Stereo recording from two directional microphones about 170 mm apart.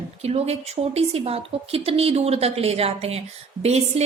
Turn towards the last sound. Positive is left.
turn(degrees=-40)  # may be behind; listen again after turning